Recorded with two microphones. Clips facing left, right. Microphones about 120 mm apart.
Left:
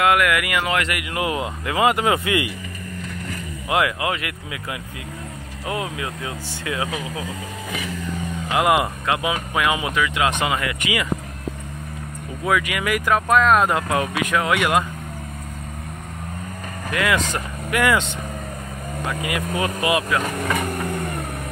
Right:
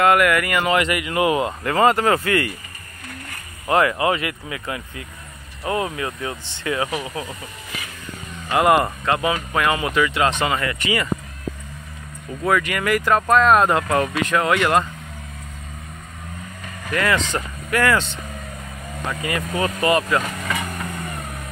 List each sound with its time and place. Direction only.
0.0 s speech: 5° left (ahead or behind)
3.6 s speech: 5° left (ahead or behind)
8.5 s speech: 5° left (ahead or behind)
12.4 s speech: 5° left (ahead or behind)
16.9 s speech: 5° left (ahead or behind)
20.9 s vehicle: 65° left (ahead or behind)